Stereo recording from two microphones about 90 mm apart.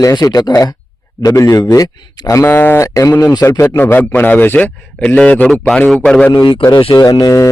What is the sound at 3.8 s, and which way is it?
A man's voice, 20° left (ahead or behind).